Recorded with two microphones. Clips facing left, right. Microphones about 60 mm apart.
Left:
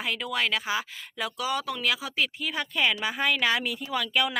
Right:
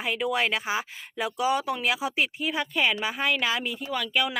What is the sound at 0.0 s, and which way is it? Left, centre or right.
Speech, centre.